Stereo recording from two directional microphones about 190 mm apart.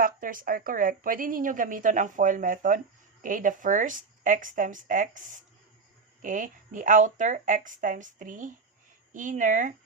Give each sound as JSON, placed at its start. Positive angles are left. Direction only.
{"t": 0.0, "sound": "a woman's voice", "side_deg": -45}